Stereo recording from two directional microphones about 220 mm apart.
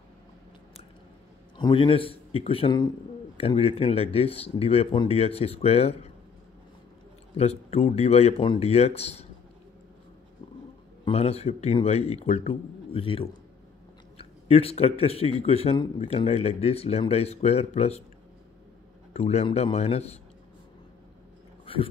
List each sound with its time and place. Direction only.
1.6 s speech: 25° left (ahead or behind)
7.3 s speech: 30° left (ahead or behind)
11.1 s speech: 30° left (ahead or behind)
19.1 s speech: 30° left (ahead or behind)